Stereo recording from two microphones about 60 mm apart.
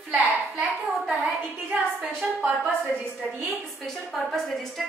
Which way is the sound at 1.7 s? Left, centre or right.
Centre.